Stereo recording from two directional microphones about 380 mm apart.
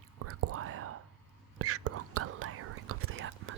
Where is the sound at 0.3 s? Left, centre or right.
Right.